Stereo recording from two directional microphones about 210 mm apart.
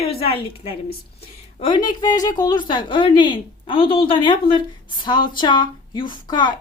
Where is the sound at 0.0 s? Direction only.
25° left (ahead or behind).